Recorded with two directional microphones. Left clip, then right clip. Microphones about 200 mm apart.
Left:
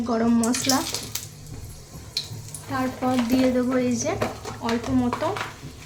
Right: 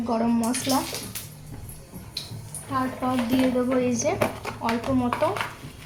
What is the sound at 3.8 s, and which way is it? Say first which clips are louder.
Speech: right 1 dB; centre (ahead or behind).